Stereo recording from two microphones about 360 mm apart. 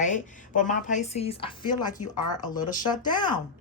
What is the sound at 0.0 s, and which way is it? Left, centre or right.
A woman's voice, left.